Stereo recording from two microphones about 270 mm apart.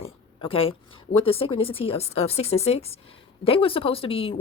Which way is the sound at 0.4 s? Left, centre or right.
Centre.